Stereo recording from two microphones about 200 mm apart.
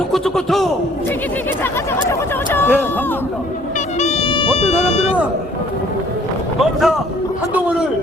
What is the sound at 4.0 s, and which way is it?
Music, 35° left (ahead or behind).